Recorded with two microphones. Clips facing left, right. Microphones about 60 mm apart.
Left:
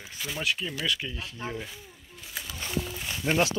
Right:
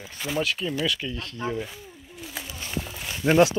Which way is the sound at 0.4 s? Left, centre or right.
Centre.